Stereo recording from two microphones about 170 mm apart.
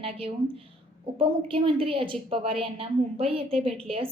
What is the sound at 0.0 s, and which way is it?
A woman's voice, 35° right (ahead or behind).